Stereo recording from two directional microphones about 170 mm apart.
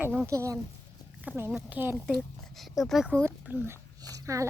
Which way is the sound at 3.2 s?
15° right (ahead or behind).